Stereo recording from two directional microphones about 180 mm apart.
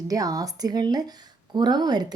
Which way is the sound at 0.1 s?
20° right (ahead or behind).